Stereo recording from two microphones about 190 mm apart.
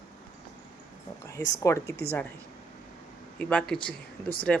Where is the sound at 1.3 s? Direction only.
15° left (ahead or behind).